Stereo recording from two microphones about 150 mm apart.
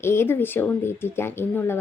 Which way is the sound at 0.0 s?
15° left (ahead or behind).